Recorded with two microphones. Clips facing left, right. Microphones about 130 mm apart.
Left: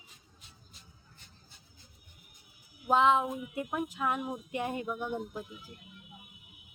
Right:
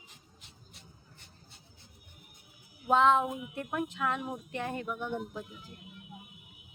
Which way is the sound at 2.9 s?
Centre (ahead or behind).